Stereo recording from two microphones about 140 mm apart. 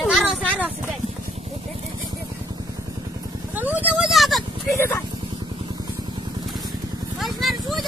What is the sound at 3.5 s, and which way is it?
Vehicle, 10° right (ahead or behind).